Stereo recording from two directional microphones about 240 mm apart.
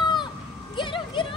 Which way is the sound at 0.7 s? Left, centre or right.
Centre.